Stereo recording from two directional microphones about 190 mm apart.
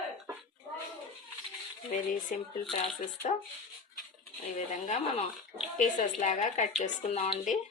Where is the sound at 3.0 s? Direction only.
40° left (ahead or behind).